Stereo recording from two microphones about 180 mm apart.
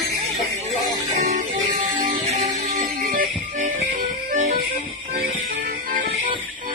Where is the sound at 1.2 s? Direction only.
45° right (ahead or behind).